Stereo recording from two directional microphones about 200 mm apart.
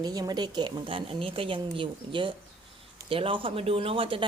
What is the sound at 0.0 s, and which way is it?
A woman's voice, 20° right (ahead or behind).